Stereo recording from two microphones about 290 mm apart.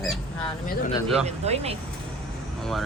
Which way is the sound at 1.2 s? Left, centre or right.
Right.